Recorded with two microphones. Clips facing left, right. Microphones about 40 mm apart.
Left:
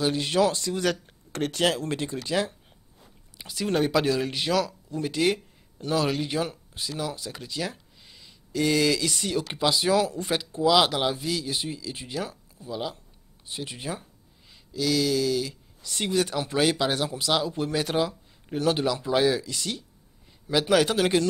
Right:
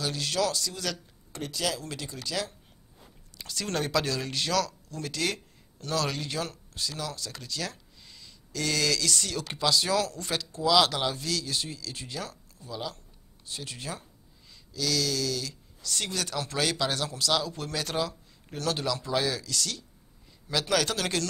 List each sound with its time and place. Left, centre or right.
0.0 s speech: left
1.3 s speech: left
3.3 s speech: centre